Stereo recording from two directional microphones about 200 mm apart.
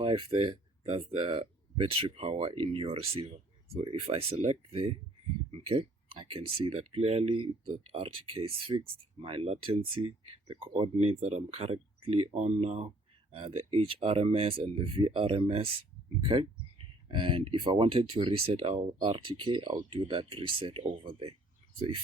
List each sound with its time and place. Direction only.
0.0 s speech: 25° right (ahead or behind)